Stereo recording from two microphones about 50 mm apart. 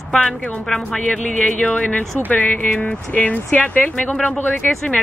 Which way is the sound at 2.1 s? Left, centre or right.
Left.